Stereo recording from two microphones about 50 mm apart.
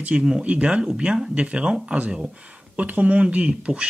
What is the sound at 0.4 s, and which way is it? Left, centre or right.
Speech, right.